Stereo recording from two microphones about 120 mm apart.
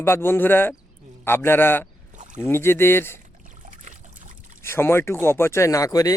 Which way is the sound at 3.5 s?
90° right.